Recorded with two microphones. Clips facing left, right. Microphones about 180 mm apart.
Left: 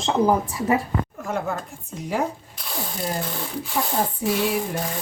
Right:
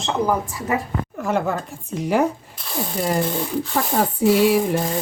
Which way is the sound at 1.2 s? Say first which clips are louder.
Right 5 dB; 85° right.